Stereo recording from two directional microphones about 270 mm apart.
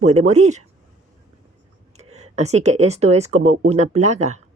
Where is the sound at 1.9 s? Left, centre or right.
Right.